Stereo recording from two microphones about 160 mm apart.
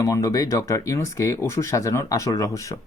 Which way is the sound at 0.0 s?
20° left (ahead or behind).